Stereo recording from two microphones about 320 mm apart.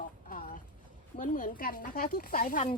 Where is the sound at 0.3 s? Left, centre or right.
Left.